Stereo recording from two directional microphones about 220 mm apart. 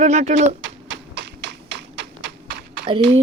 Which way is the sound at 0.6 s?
55° right (ahead or behind).